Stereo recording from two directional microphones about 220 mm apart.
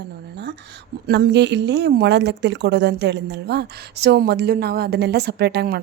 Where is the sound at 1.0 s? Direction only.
50° right (ahead or behind).